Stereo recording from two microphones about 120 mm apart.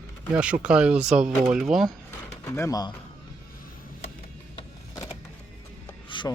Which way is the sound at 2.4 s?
25° left (ahead or behind).